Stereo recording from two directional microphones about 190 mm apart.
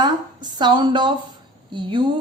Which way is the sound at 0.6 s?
25° right (ahead or behind).